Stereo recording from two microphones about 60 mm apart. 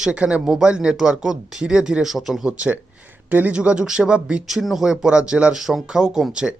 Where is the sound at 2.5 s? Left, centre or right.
Right.